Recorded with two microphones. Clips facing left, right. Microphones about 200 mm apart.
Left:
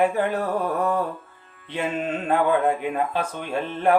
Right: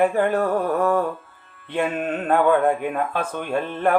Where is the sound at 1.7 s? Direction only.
55° right (ahead or behind).